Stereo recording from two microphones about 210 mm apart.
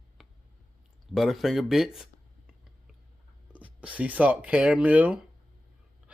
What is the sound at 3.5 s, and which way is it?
Speech, 5° right (ahead or behind).